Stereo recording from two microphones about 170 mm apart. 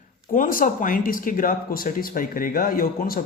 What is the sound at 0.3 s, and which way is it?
A man's voice, 55° left (ahead or behind).